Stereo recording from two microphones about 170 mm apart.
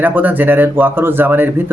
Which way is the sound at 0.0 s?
10° right (ahead or behind).